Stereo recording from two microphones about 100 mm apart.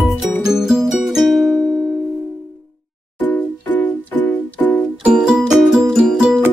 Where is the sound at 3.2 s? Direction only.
15° left (ahead or behind).